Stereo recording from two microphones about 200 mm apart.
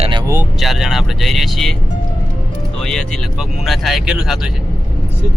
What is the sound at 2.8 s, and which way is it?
Speech, centre (ahead or behind).